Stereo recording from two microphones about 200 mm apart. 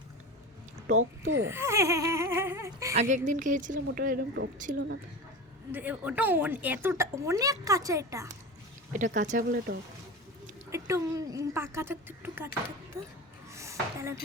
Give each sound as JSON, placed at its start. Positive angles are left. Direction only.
{"t": 0.9, "sound": "speech", "side_deg": -65}
{"t": 1.5, "sound": "speech", "side_deg": -15}
{"t": 2.9, "sound": "speech", "side_deg": -35}
{"t": 5.7, "sound": "speech", "side_deg": -10}
{"t": 9.1, "sound": "speech", "side_deg": -40}
{"t": 10.7, "sound": "speech", "side_deg": -15}
{"t": 13.5, "sound": "a sound", "side_deg": -15}